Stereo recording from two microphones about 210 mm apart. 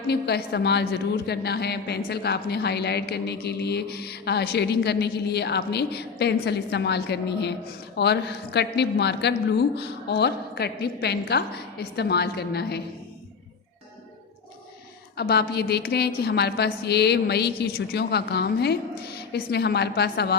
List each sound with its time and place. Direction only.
0.1 s a woman's voice: 50° left (ahead or behind)
15.1 s a woman's voice: 50° left (ahead or behind)